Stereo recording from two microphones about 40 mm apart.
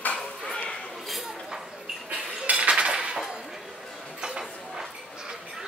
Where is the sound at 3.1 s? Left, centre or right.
Centre.